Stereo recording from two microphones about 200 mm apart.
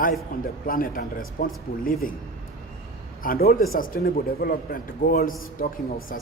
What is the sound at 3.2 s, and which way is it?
A man's voice, 50° left (ahead or behind).